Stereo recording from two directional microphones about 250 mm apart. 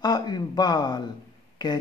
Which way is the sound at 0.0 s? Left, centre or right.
Centre.